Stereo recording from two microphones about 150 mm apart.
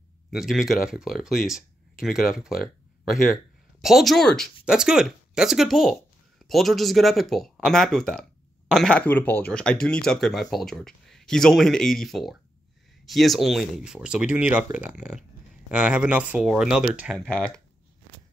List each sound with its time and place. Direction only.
0.3 s speech: 5° right (ahead or behind)
17.2 s speech: 5° left (ahead or behind)